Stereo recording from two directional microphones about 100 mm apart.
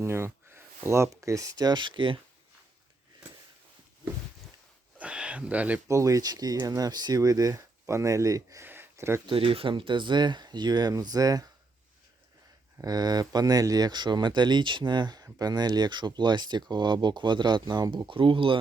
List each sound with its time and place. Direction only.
0.0 s speech: 25° right (ahead or behind); by 2.1 s 55° right (ahead or behind)
4.9 s a sound: 10° right (ahead or behind)
5.9 s speech: 35° right (ahead or behind)
8.6 s a sound: 20° right (ahead or behind)
9.2 s speech: 60° right (ahead or behind); by 11.4 s 40° right (ahead or behind)
12.8 s speech: 40° right (ahead or behind)
18.1 s speech: 60° right (ahead or behind)